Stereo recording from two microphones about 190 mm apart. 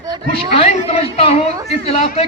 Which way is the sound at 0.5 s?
30° left (ahead or behind).